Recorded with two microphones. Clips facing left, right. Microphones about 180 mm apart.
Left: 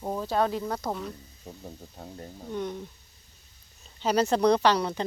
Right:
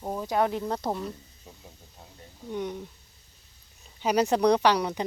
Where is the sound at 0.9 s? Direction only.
Centre (ahead or behind).